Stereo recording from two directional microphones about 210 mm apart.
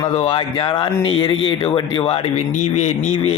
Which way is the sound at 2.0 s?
25° left (ahead or behind).